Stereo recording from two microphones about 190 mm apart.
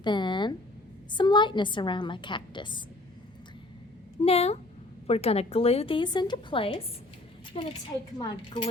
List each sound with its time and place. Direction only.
0.0 s a woman's voice: 25° left (ahead or behind)
4.2 s a woman's voice: 30° left (ahead or behind)